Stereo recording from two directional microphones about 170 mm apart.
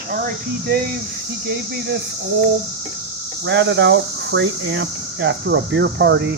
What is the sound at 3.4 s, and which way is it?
Speech, 90° right.